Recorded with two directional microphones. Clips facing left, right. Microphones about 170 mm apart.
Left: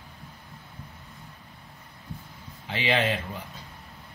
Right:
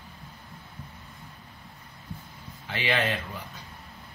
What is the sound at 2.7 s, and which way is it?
Speech, 25° left (ahead or behind).